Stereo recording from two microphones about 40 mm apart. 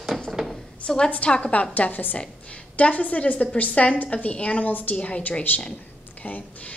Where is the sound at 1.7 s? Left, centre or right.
Left.